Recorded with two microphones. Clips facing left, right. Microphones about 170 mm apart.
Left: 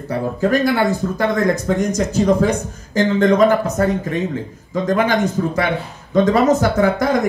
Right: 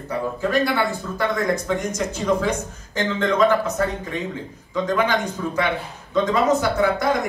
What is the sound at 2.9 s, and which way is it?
Speech, 45° left (ahead or behind).